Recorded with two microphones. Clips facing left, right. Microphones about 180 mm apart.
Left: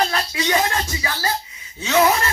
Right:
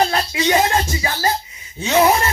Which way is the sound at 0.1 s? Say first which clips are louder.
Right 4 dB; 25° right (ahead or behind).